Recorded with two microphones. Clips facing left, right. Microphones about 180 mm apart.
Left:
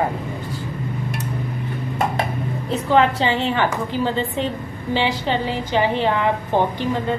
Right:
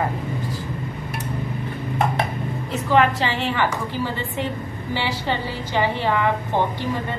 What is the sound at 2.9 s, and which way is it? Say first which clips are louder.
Speech: left 2 dB; 25° left (ahead or behind).